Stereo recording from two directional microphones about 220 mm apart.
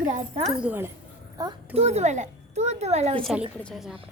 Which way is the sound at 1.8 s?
30° right (ahead or behind).